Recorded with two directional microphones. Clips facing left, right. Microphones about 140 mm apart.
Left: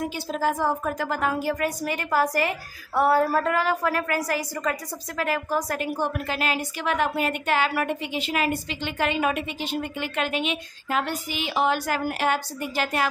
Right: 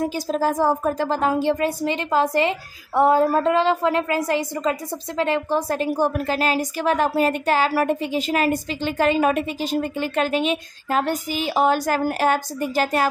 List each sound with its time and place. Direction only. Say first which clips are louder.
0.0 s a woman's voice: right 4 dB; 35° right (ahead or behind)
5.9 s a woman's voice: right 6 dB; 40° right (ahead or behind)